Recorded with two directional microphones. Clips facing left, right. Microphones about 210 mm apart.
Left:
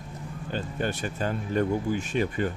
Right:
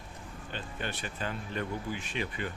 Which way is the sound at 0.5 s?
45° left (ahead or behind).